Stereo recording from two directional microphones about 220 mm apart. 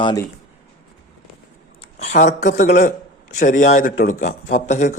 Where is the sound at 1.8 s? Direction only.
30° left (ahead or behind).